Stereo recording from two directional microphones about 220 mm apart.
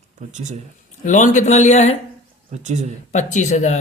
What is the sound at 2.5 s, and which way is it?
Speech, 30° right (ahead or behind).